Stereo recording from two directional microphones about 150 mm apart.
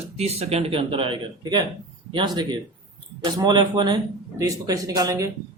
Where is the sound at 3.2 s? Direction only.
30° right (ahead or behind).